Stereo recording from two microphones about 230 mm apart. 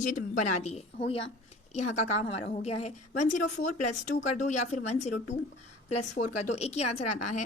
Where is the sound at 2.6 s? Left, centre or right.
Left.